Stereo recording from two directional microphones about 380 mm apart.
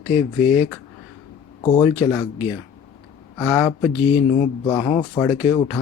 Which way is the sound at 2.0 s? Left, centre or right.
Centre.